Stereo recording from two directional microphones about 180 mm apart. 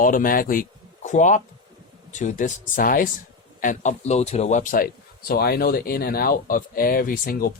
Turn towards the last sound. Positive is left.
turn(degrees=50)  # may be behind; listen again after turning